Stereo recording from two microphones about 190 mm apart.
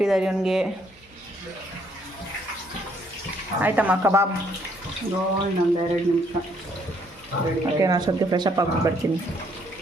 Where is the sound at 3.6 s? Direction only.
10° right (ahead or behind).